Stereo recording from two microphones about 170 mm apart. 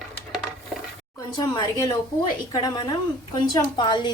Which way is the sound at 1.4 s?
20° left (ahead or behind).